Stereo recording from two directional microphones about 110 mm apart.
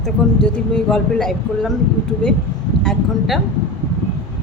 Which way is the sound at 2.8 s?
Centre (ahead or behind).